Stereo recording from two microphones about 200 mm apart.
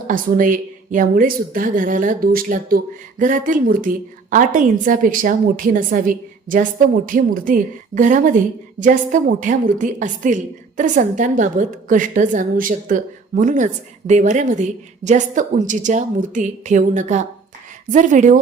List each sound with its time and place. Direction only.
0.1 s a woman's voice: 40° right (ahead or behind)